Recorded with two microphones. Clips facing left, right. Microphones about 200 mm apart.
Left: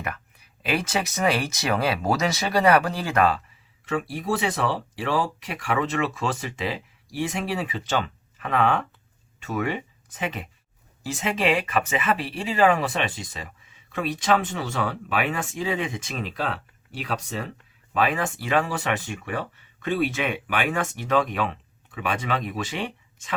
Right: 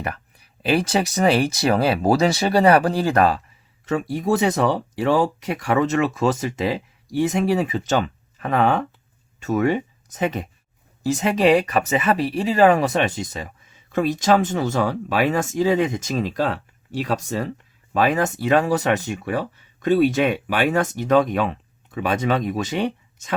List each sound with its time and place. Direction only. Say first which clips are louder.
0.0 s speech: right 4 dB; 35° right (ahead or behind)